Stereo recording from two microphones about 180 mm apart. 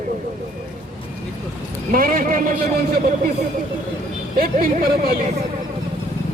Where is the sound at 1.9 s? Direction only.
50° right (ahead or behind).